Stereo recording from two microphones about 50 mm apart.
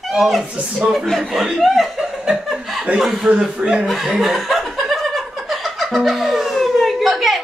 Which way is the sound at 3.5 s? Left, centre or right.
Right.